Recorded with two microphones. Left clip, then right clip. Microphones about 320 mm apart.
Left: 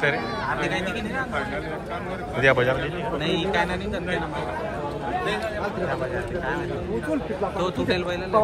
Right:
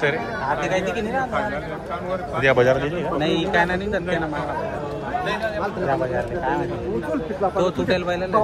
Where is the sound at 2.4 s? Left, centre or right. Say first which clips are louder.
Right 3 dB; centre.